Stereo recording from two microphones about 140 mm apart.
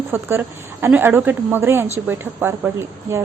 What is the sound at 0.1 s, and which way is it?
A woman's voice, 15° right (ahead or behind).